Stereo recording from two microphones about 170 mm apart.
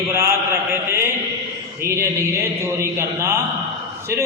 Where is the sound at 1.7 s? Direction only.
15° right (ahead or behind).